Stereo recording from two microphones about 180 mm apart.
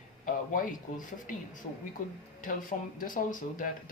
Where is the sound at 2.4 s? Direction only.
50° left (ahead or behind).